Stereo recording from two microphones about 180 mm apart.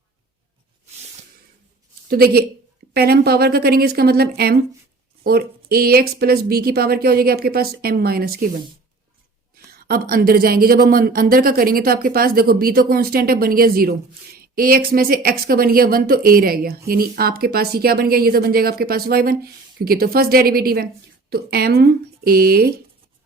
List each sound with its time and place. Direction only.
2.0 s speech: 60° right (ahead or behind)
9.6 s speech: 55° right (ahead or behind)